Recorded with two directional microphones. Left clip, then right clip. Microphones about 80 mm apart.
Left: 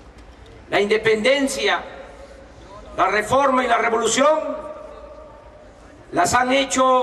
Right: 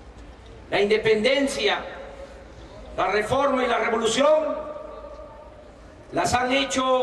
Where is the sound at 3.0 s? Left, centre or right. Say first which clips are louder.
Left 4 dB; left.